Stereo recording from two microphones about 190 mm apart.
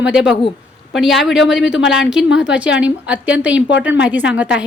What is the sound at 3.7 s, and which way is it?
Speech, 70° left (ahead or behind).